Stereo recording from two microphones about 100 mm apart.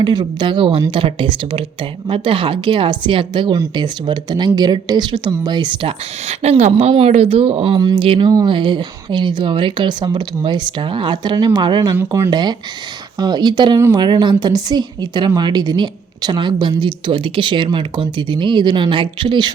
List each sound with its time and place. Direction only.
0.0 s a woman's voice: 50° right (ahead or behind)
6.2 s speech: 90° right
7.9 s a woman's voice: 65° right (ahead or behind)